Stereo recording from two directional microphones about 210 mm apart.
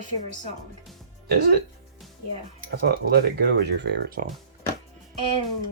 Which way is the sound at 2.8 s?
50° right (ahead or behind).